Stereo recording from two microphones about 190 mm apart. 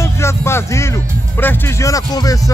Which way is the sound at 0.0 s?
15° left (ahead or behind).